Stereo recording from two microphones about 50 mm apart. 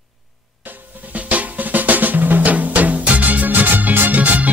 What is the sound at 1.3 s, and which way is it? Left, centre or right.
Drum, right.